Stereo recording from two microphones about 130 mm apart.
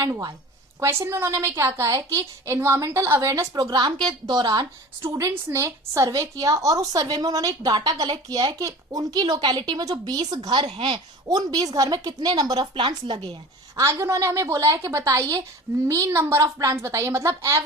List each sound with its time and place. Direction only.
0.0 s a woman's voice: 25° right (ahead or behind)
10.7 s a woman's voice: 40° right (ahead or behind)
13.7 s a woman's voice: 20° right (ahead or behind)